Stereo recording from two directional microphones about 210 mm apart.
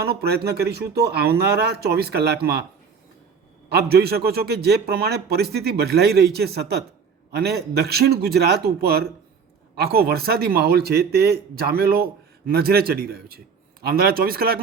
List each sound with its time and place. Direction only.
0.1 s a man's voice: 50° right (ahead or behind)
3.7 s a man's voice: 50° right (ahead or behind)